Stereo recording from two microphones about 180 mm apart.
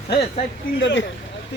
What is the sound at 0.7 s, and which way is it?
Speech, 85° left.